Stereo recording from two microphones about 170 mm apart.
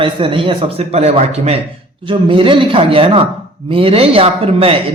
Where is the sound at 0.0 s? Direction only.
30° right (ahead or behind).